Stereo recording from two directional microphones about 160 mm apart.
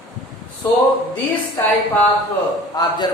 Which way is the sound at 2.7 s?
25° left (ahead or behind).